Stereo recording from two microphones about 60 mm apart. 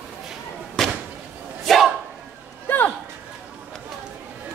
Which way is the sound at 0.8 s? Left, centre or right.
Centre.